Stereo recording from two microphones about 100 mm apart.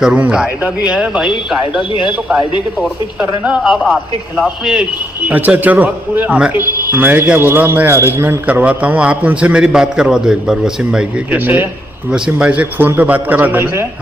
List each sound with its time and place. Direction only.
0.0 s a man's voice: 10° right (ahead or behind)
1.8 s a man's voice: 55° left (ahead or behind)
3.4 s a man's voice: 5° right (ahead or behind)
5.2 s a man's voice: 15° right (ahead or behind)